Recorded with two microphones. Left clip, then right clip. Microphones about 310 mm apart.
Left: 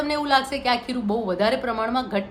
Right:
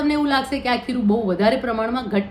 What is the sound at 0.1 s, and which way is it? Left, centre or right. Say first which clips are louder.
A woman's voice: left 3 dB; centre.